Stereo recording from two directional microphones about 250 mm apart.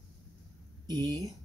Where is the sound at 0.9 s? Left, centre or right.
Centre.